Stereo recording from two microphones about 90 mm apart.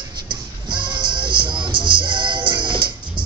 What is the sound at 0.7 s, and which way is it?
Music, 60° right (ahead or behind).